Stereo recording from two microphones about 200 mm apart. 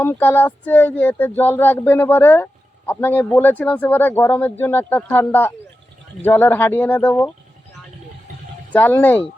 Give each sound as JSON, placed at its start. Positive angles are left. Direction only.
{"t": 0.0, "sound": "speech", "side_deg": 10}
{"t": 8.7, "sound": "speech", "side_deg": 10}